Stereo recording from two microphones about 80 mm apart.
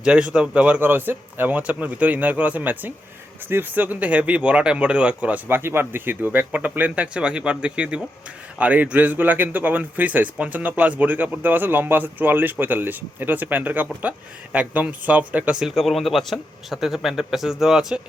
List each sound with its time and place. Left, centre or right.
0.0 s a man's voice: centre
15.7 s speech: centre